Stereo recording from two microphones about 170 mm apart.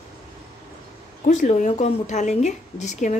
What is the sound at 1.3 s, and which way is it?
A woman's voice, 45° left (ahead or behind).